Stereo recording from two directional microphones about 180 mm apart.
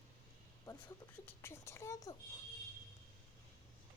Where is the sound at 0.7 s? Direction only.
15° left (ahead or behind).